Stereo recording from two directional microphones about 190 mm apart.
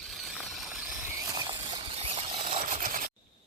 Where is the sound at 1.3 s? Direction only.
20° right (ahead or behind); by 3.0 s 40° right (ahead or behind).